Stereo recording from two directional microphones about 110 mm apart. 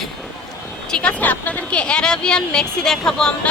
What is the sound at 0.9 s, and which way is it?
Speech, 10° left (ahead or behind).